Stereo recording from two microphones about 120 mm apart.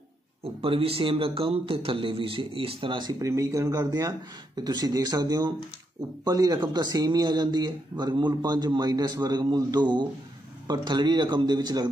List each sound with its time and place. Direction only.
0.4 s speech: 50° right (ahead or behind); by 11.9 s 35° right (ahead or behind)